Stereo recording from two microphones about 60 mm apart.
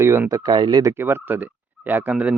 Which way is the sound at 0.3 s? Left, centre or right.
Right.